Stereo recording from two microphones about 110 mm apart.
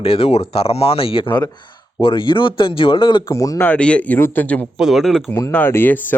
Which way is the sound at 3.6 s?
10° left (ahead or behind).